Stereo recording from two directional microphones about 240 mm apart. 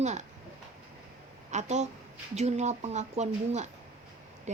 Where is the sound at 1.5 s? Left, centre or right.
Right.